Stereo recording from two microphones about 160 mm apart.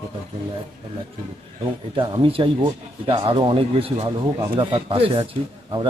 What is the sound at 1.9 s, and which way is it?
A man's voice, 30° right (ahead or behind).